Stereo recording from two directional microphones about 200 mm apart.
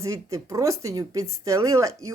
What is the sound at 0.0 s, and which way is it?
A woman's voice, 15° right (ahead or behind).